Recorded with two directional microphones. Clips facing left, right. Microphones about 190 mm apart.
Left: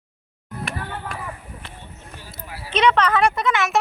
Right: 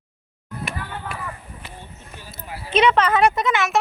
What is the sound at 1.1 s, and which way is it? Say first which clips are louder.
Run: even; 5° right (ahead or behind).